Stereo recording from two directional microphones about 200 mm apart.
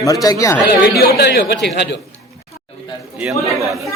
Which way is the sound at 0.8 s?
50° left (ahead or behind).